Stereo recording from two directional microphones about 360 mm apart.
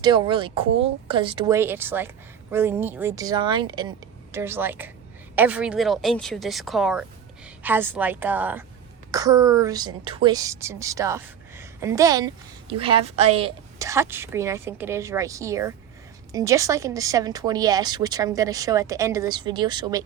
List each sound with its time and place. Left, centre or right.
0.0 s a woman's voice: centre